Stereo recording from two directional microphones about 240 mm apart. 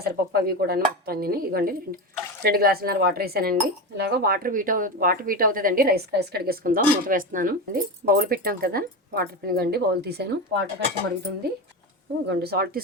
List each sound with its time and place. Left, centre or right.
0.0 s speech: right
12.3 s speech: right